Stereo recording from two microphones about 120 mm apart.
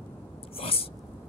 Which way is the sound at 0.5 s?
50° left (ahead or behind).